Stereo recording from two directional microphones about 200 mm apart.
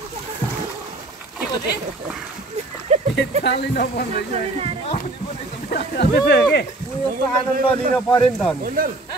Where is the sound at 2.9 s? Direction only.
35° right (ahead or behind).